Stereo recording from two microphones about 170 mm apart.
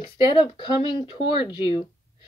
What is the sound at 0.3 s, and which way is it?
A woman's voice, 30° left (ahead or behind).